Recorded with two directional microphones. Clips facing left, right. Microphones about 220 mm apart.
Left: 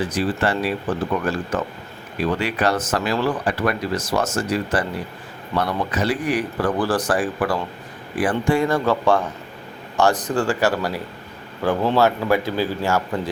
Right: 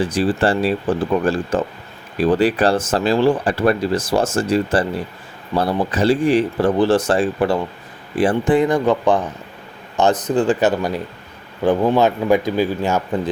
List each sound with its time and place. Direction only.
0.0 s speech: 30° right (ahead or behind)